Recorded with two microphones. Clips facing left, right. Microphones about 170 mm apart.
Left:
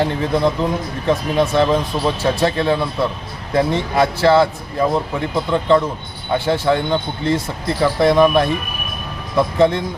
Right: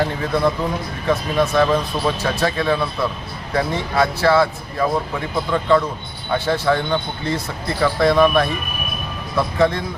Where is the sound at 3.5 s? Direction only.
20° left (ahead or behind).